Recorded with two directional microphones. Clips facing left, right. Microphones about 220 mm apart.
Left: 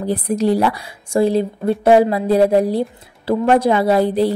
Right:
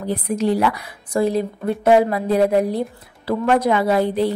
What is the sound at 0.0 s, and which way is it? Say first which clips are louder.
A woman's voice: left 3 dB; 35° left (ahead or behind).